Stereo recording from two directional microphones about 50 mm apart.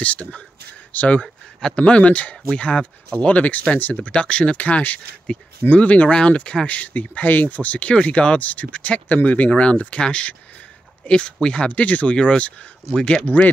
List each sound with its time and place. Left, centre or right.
0.0 s speech: left
1.2 s a sound: centre
1.8 s speech: left
7.9 s speech: centre